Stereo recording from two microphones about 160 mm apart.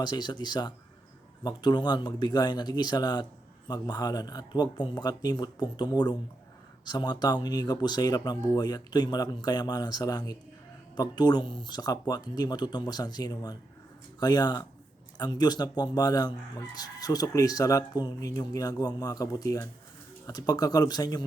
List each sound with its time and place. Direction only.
0.0 s speech: 25° left (ahead or behind)